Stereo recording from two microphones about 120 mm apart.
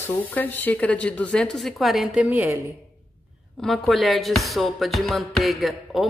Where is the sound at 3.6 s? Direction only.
Centre (ahead or behind).